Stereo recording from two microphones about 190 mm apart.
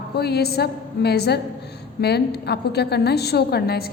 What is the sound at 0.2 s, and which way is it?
A woman's voice, 55° left (ahead or behind).